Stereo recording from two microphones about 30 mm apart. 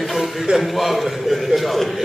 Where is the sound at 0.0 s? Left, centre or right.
Centre.